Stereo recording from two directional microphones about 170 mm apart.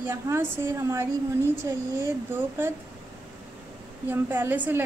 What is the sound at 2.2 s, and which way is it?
Speech, 15° right (ahead or behind).